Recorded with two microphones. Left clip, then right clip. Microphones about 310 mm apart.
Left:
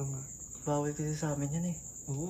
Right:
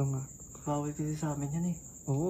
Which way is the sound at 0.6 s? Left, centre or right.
Left.